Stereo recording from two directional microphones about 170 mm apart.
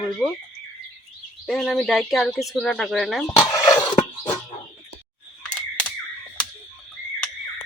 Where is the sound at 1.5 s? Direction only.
5° left (ahead or behind).